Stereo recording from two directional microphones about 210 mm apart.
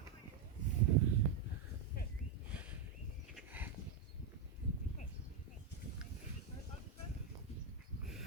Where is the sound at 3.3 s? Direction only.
10° right (ahead or behind).